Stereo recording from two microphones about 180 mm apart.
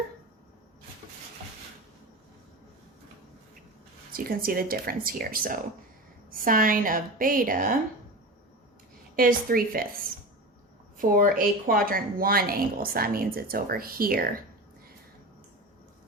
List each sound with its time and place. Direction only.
4.1 s speech: 55° right (ahead or behind)
9.1 s a woman's voice: 55° right (ahead or behind)
10.9 s speech: 50° right (ahead or behind)